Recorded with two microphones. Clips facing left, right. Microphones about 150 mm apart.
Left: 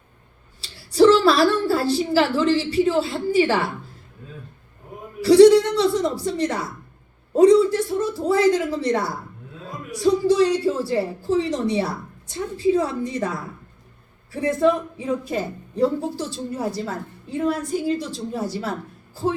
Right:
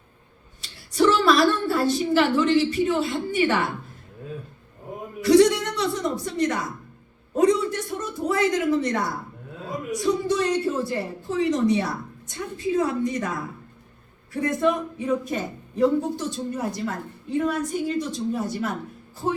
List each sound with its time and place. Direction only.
0.6 s a woman's voice: 30° left (ahead or behind)
5.2 s a woman's voice: 30° left (ahead or behind)
14.3 s a woman's voice: 30° left (ahead or behind)